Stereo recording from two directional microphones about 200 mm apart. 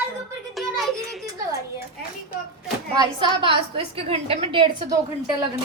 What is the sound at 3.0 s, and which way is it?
A woman's voice, 25° right (ahead or behind).